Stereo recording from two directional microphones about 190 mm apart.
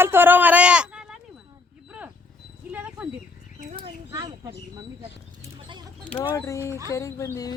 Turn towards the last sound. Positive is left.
turn(degrees=15)  # may be behind; listen again after turning